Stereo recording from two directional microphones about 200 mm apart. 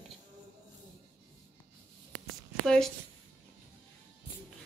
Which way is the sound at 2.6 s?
Centre (ahead or behind).